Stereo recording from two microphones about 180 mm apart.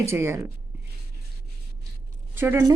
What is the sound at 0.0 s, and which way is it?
Speech, 15° right (ahead or behind).